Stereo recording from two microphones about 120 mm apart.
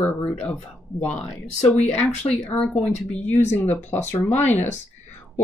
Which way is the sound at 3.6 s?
15° left (ahead or behind).